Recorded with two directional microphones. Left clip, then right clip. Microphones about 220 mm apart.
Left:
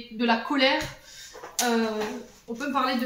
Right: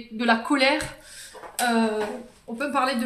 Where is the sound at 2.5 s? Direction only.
50° right (ahead or behind).